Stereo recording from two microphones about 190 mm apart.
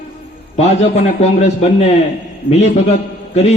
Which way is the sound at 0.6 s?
35° left (ahead or behind).